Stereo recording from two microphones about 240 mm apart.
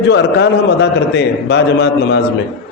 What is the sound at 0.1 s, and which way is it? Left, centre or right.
A man's voice, left.